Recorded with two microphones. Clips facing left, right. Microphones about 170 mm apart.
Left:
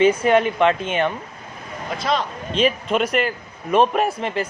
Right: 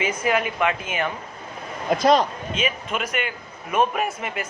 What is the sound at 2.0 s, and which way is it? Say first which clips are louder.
Speech: right 5 dB; 40° right (ahead or behind).